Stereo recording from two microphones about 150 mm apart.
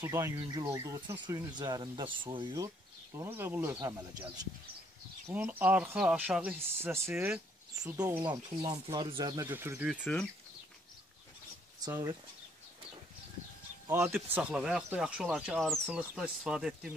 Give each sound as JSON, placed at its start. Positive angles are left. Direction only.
{"t": 0.0, "sound": "speech", "side_deg": -20}
{"t": 3.2, "sound": "speech", "side_deg": -15}
{"t": 5.3, "sound": "speech", "side_deg": -10}
{"t": 7.2, "sound": "speech", "side_deg": -5}
{"t": 8.2, "sound": "speech", "side_deg": -30}
{"t": 9.5, "sound": "speech", "side_deg": -15}
{"t": 10.1, "sound": "speech", "side_deg": 5}
{"t": 11.8, "sound": "speech", "side_deg": -25}
{"t": 14.0, "sound": "speech", "side_deg": -10}